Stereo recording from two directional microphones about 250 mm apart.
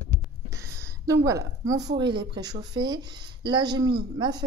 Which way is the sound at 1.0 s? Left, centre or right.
Centre.